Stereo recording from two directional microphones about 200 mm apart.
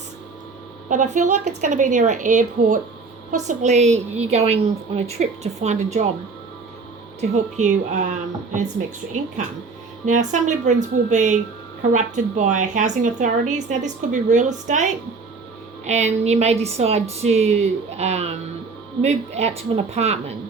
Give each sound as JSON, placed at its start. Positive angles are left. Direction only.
{"t": 0.9, "sound": "a woman's voice", "side_deg": -40}
{"t": 7.2, "sound": "a woman's voice", "side_deg": -35}
{"t": 10.1, "sound": "a woman's voice", "side_deg": -40}